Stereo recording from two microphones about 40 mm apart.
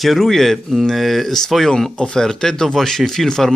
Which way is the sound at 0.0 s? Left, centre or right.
Centre.